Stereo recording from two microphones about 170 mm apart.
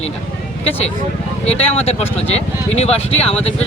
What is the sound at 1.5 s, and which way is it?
Speech, 35° left (ahead or behind).